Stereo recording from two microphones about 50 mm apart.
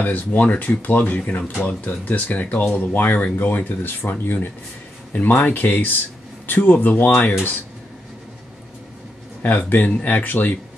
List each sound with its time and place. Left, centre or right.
0.0 s speech: left
3.4 s speech: left
9.4 s speech: left